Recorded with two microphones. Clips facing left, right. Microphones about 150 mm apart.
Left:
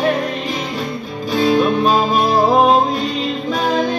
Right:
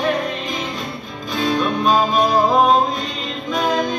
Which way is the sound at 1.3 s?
30° left (ahead or behind).